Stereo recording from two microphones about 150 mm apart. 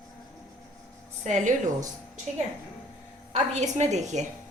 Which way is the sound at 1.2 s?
55° right (ahead or behind).